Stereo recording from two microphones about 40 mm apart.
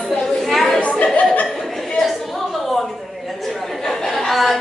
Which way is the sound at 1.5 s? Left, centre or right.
Centre.